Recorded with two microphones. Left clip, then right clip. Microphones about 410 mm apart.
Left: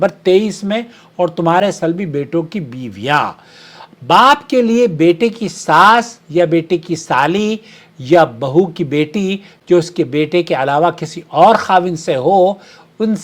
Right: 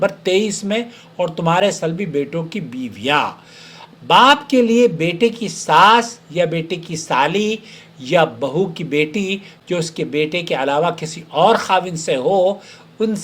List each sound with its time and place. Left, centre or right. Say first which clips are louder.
0.0 s speech: left 4 dB; left